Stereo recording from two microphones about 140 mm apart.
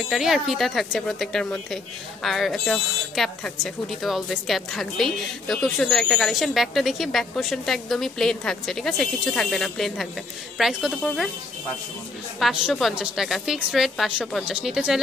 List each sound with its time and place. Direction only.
0.1 s speech: centre (ahead or behind)
12.4 s speech: centre (ahead or behind)